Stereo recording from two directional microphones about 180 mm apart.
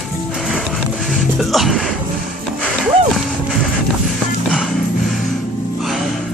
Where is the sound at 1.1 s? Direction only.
Centre (ahead or behind).